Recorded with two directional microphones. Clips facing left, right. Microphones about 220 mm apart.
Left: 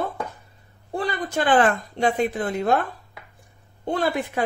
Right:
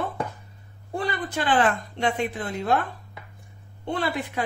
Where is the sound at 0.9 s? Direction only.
40° left (ahead or behind).